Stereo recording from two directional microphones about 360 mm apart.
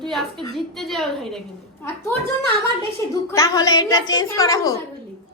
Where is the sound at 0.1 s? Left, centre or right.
Centre.